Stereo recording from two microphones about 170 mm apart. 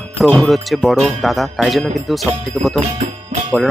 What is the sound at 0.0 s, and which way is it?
Speech, centre (ahead or behind).